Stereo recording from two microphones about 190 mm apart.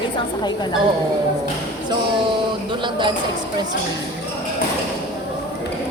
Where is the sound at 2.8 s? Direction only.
25° right (ahead or behind).